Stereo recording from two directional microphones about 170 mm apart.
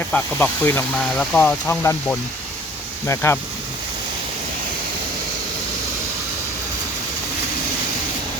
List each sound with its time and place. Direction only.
0.1 s speech: 10° left (ahead or behind)